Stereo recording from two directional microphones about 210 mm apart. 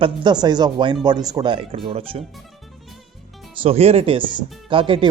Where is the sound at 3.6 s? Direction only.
30° right (ahead or behind).